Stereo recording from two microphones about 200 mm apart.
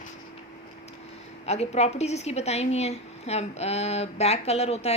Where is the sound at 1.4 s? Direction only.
30° left (ahead or behind).